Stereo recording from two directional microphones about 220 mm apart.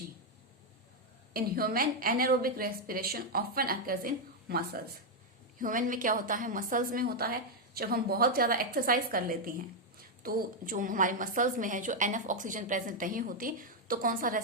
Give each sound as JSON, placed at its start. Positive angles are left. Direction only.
{"t": 1.3, "sound": "a woman's voice", "side_deg": -40}